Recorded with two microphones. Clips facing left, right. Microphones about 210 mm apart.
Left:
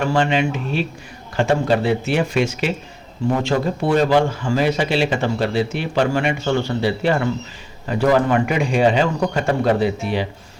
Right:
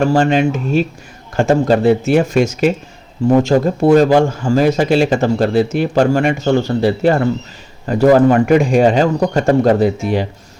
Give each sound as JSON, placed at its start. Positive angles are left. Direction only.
{"t": 0.0, "sound": "speech", "side_deg": -45}